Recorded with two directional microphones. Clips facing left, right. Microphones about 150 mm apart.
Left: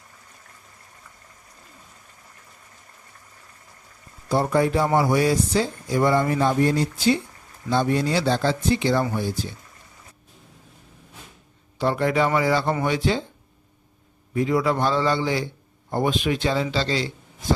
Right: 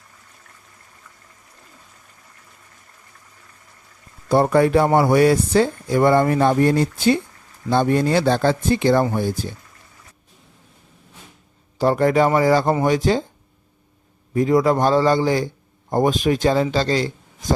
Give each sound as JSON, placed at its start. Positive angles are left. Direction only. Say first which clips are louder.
{"t": 4.3, "sound": "speech", "louder": "right 5 dB", "side_deg": -60}
{"t": 11.8, "sound": "speech", "louder": "right 5 dB", "side_deg": -45}
{"t": 14.3, "sound": "a man's voice", "louder": "right 5 dB", "side_deg": -40}